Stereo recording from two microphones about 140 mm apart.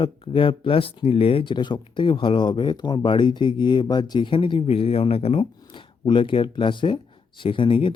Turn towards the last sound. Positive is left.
turn(degrees=40)  # may be behind; listen again after turning